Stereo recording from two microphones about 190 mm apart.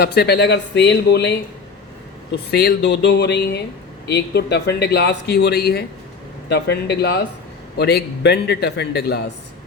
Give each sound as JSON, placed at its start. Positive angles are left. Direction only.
{"t": 0.0, "sound": "speech", "side_deg": 60}